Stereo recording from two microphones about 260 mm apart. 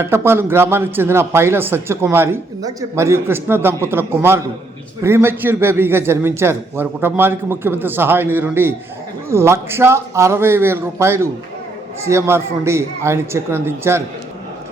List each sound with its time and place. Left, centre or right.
0.0 s a man's voice: centre